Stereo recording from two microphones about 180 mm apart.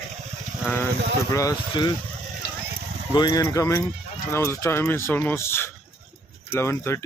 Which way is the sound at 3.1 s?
20° left (ahead or behind).